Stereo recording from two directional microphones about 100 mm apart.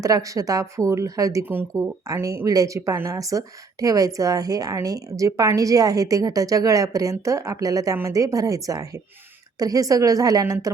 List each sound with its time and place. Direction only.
0.0 s speech: 35° right (ahead or behind)
1.5 s speech: 20° right (ahead or behind)
2.0 s speech: 30° right (ahead or behind)